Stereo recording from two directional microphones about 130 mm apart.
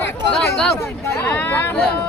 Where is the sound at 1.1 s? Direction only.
20° left (ahead or behind).